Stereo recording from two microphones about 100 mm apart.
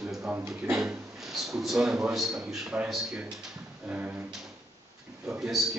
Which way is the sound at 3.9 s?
15° right (ahead or behind).